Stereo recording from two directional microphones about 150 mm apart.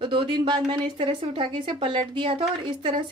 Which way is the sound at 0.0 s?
35° right (ahead or behind).